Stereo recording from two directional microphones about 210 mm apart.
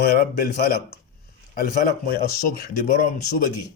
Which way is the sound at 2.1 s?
45° left (ahead or behind).